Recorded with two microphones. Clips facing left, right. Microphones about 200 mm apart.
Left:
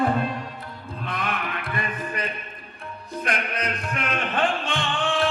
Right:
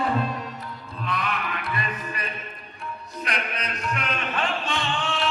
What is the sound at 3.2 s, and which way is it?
Music, 50° left (ahead or behind).